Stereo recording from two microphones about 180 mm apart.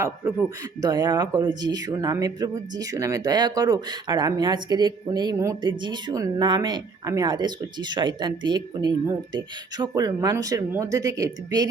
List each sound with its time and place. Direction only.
0.8 s speech: 20° right (ahead or behind)